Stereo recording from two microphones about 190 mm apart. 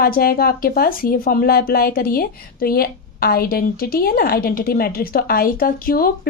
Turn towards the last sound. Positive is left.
turn(degrees=50)  # may be behind; listen again after turning